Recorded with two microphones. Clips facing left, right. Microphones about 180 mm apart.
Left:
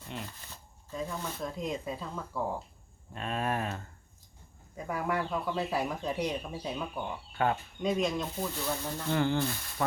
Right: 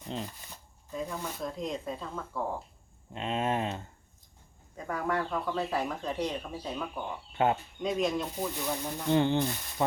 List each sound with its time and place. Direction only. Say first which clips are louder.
0.1 s speech: right 4 dB; 30° right (ahead or behind)
0.9 s speech: right 1 dB; 10° right (ahead or behind)
3.1 s speech: right 2 dB; 20° right (ahead or behind)
4.9 s speech: right 1 dB; 10° left (ahead or behind)
7.3 s speech: right 2 dB; 20° right (ahead or behind)
7.8 s speech: left 3 dB; centre (ahead or behind)
8.4 s speech: right 1 dB; 15° right (ahead or behind)